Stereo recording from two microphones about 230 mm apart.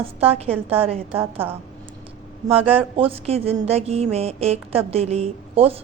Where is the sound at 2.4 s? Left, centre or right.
Right.